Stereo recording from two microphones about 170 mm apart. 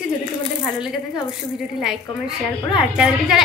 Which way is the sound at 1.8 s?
5° right (ahead or behind).